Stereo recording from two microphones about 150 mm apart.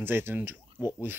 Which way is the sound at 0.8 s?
25° left (ahead or behind).